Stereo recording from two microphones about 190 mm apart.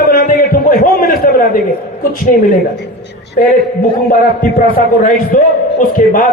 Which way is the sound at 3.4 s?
50° left (ahead or behind).